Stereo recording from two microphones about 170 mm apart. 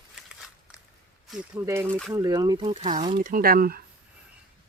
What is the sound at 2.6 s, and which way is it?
Speech, 35° right (ahead or behind).